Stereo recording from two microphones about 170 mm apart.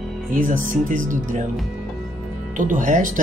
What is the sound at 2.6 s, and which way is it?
Speech, 50° right (ahead or behind).